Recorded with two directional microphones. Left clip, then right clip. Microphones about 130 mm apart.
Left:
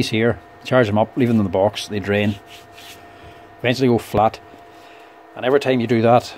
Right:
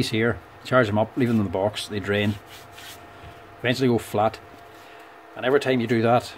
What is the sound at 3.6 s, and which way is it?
Speech, 40° left (ahead or behind).